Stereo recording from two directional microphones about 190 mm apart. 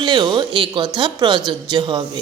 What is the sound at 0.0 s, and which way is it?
A woman's voice, 25° right (ahead or behind).